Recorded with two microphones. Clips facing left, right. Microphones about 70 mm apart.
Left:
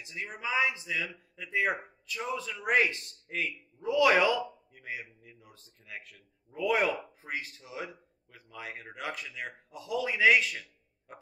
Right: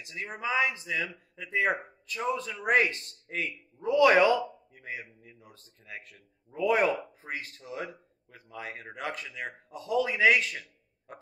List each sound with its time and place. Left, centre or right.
0.3 s a man's voice: right